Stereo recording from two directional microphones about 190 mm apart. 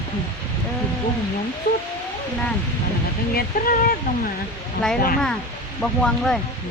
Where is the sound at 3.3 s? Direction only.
45° left (ahead or behind).